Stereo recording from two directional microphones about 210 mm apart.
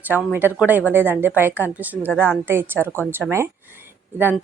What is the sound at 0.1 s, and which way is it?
A woman's voice, 5° right (ahead or behind).